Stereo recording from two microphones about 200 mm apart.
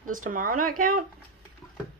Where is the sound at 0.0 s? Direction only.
45° right (ahead or behind).